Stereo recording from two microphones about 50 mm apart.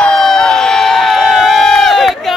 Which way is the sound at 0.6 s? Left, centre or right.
Centre.